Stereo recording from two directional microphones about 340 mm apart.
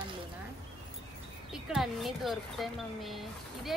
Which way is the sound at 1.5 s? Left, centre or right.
Centre.